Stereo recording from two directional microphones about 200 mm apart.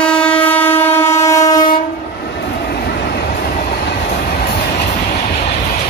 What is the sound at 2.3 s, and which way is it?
Train, 55° left (ahead or behind).